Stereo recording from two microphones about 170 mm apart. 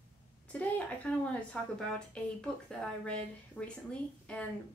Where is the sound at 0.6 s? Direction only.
10° left (ahead or behind).